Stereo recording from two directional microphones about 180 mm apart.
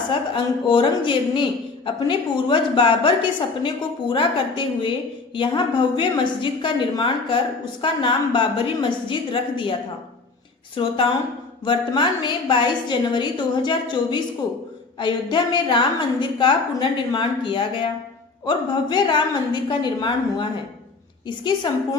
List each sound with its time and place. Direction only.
0.1 s a woman's voice: 30° left (ahead or behind)
4.1 s a woman's voice: 30° left (ahead or behind)
10.8 s a woman's voice: 30° left (ahead or behind)